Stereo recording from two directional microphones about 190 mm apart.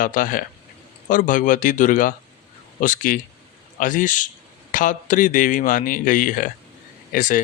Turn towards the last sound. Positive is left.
turn(degrees=45)  # may be behind; listen again after turning